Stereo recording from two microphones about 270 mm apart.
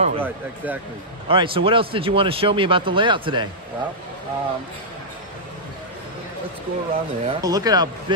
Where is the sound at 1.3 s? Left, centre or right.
Centre.